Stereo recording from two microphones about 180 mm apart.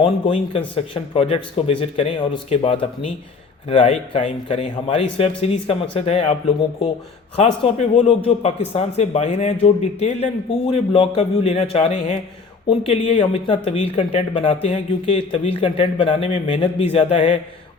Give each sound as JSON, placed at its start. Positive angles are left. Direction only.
{"t": 0.0, "sound": "speech", "side_deg": 30}
{"t": 7.3, "sound": "speech", "side_deg": 35}